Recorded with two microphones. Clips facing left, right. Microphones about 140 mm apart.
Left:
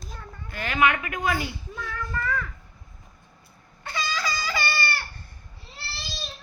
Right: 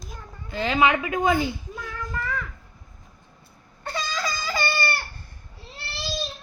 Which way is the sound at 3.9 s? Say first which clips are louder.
Even; 35° right (ahead or behind).